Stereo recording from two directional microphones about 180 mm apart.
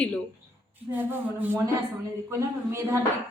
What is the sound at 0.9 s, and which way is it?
Speech, 10° right (ahead or behind).